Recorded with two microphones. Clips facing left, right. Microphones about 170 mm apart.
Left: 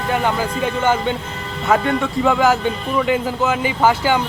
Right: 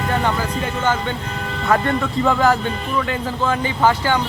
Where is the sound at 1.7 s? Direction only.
5° left (ahead or behind).